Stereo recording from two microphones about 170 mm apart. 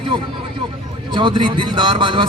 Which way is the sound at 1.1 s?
30° right (ahead or behind).